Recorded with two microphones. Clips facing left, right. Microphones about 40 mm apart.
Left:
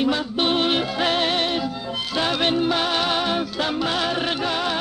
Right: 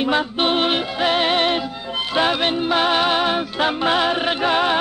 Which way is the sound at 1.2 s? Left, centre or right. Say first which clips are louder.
Right 3 dB; right.